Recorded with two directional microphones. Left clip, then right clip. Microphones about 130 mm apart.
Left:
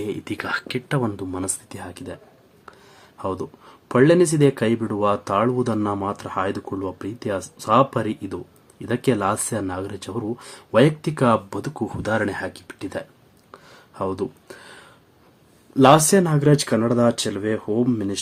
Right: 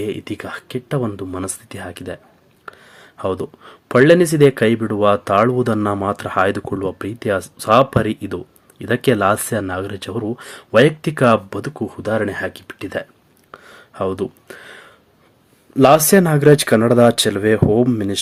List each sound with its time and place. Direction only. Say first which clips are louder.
0.0 s speech: right 3 dB; 15° right (ahead or behind)
13.5 s a sound: right 6 dB; 25° right (ahead or behind)
15.8 s speech: right 3 dB; 20° right (ahead or behind); by 17.8 s 40° right (ahead or behind)
17.8 s speech: right 4 dB; 30° right (ahead or behind)